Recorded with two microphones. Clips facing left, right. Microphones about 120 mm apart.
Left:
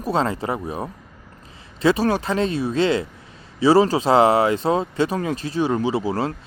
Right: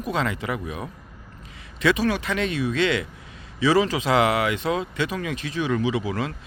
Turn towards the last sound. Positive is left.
turn(degrees=35)  # may be behind; listen again after turning